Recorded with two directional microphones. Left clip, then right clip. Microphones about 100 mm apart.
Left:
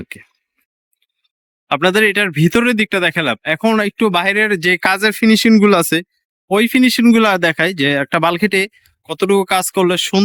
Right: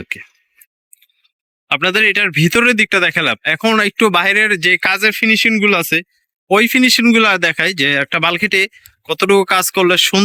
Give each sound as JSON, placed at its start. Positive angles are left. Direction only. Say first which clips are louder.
{"t": 0.0, "sound": "speech", "louder": "right 8 dB", "side_deg": 25}
{"t": 1.7, "sound": "speech", "louder": "even", "side_deg": 40}
{"t": 2.7, "sound": "speech", "louder": "right 3 dB", "side_deg": 20}
{"t": 5.3, "sound": "speech", "louder": "left 3 dB", "side_deg": 60}
{"t": 6.5, "sound": "speech", "louder": "right 3 dB", "side_deg": 20}